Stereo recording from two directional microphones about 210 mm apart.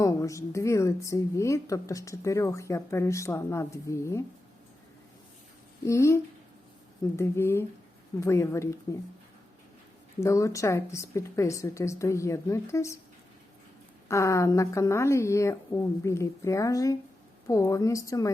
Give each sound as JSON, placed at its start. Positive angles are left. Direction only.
{"t": 0.0, "sound": "a woman's voice", "side_deg": 15}
{"t": 5.8, "sound": "a woman's voice", "side_deg": 15}
{"t": 7.2, "sound": "a woman's voice", "side_deg": 10}
{"t": 10.2, "sound": "a woman's voice", "side_deg": 15}
{"t": 14.1, "sound": "a woman's voice", "side_deg": 15}